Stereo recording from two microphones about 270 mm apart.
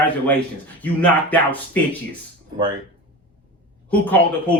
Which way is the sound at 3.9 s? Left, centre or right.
Centre.